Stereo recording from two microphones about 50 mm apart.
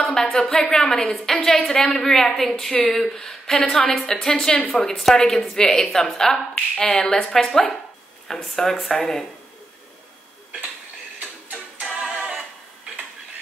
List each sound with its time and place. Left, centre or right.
0.0 s a woman's voice: centre
4.0 s a woman's voice: left
4.6 s a woman's voice: left
4.8 s a woman's voice: centre
11.8 s a capella: centre
12.2 s music: centre